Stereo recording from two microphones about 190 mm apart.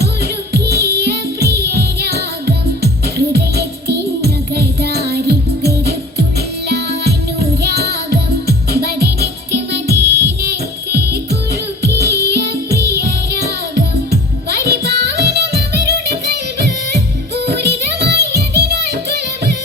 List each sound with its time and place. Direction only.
0.0 s music: 60° right (ahead or behind)
3.3 s music: 60° right (ahead or behind)
14.6 s music: 60° right (ahead or behind)